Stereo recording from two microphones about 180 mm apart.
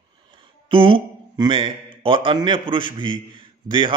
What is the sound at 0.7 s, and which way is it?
A man's voice, 30° right (ahead or behind).